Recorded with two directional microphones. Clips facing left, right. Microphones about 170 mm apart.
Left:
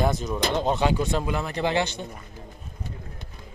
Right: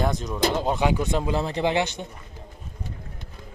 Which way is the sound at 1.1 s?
25° right (ahead or behind).